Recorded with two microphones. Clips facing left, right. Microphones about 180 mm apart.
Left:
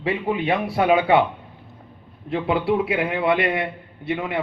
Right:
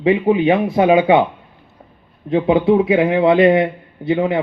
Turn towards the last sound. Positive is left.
turn(degrees=-25)  # may be behind; listen again after turning